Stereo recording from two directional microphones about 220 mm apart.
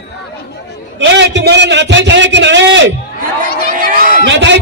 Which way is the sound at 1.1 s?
50° right (ahead or behind).